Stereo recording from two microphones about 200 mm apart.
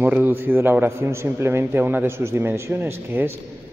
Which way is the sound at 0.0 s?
10° right (ahead or behind).